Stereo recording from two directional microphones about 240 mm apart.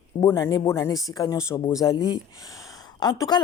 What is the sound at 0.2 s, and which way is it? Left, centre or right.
Speech, centre.